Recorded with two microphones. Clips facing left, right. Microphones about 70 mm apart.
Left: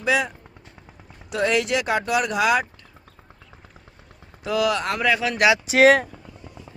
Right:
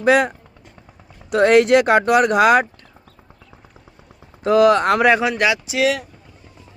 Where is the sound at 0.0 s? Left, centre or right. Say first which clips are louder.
Right 7 dB; right.